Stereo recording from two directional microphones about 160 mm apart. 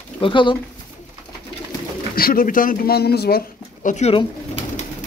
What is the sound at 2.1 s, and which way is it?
Speech, 65° left (ahead or behind).